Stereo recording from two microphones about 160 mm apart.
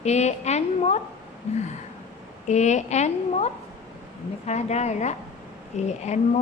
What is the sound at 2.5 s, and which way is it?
Speech, 45° left (ahead or behind).